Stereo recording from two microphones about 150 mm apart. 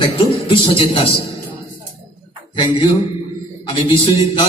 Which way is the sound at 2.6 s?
40° left (ahead or behind).